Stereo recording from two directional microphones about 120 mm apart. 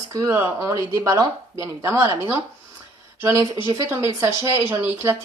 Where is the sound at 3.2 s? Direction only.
25° right (ahead or behind).